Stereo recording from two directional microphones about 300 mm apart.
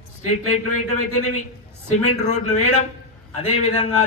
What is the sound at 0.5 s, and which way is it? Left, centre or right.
Speech, left.